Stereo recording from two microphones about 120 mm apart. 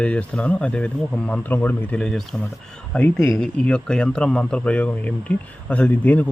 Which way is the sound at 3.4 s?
10° left (ahead or behind).